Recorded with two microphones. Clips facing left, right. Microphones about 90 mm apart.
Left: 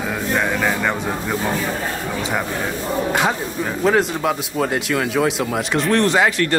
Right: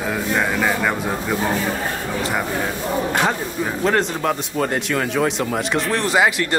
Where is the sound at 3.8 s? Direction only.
5° left (ahead or behind).